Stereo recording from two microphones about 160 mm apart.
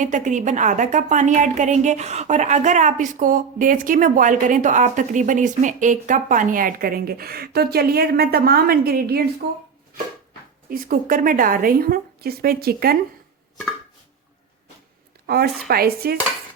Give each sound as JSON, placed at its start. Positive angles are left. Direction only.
{"t": 0.0, "sound": "a woman's voice", "side_deg": -50}
{"t": 10.7, "sound": "a woman's voice", "side_deg": -60}
{"t": 15.3, "sound": "a woman's voice", "side_deg": -75}